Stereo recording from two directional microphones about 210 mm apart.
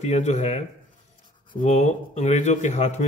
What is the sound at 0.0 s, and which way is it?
Speech, 30° left (ahead or behind).